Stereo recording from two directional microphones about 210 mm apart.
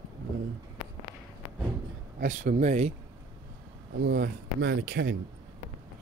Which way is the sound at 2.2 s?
40° right (ahead or behind).